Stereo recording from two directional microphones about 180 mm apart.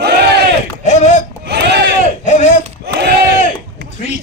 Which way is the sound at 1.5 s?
65° right (ahead or behind).